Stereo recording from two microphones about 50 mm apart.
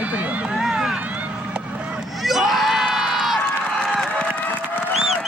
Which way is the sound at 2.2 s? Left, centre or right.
Centre.